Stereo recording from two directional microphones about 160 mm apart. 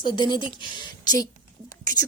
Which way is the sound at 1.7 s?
20° left (ahead or behind).